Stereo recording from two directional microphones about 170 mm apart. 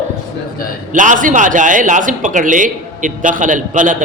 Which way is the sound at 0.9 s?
50° right (ahead or behind).